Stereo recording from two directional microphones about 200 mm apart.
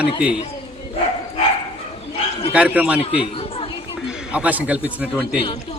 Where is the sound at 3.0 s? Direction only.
25° left (ahead or behind).